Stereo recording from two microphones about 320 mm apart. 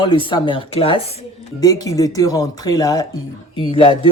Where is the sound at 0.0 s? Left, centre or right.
Centre.